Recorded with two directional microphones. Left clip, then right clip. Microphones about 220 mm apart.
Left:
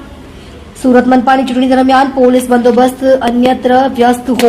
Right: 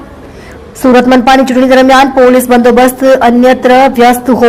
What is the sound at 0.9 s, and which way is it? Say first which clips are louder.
A woman's voice: right 3 dB; 25° right (ahead or behind).